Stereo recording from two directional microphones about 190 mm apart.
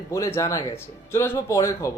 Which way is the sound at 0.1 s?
15° left (ahead or behind).